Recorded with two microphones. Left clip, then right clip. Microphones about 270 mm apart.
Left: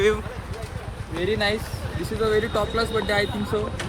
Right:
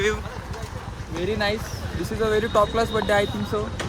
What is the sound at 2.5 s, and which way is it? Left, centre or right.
Speech, right.